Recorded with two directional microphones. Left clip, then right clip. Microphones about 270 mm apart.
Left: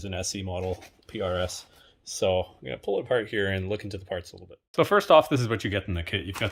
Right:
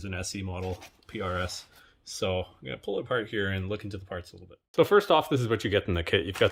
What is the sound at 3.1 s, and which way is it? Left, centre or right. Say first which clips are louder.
Speech: left 3 dB; right.